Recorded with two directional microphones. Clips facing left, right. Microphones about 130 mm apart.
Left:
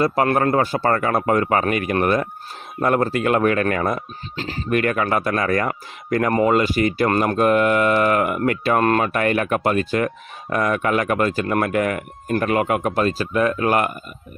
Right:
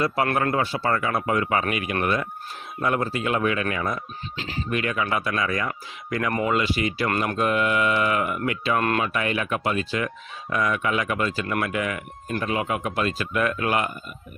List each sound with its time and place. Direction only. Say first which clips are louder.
0.3 s speech: left 5 dB; 35° left (ahead or behind)
4.4 s speech: left 2 dB; 40° left (ahead or behind)
4.7 s speech: left 6 dB; 55° left (ahead or behind); by 13.7 s 35° left (ahead or behind)